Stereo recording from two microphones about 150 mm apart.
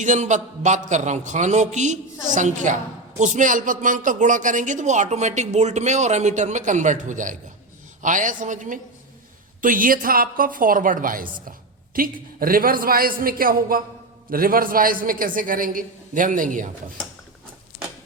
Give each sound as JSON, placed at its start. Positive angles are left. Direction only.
{"t": 0.0, "sound": "a woman's voice", "side_deg": -55}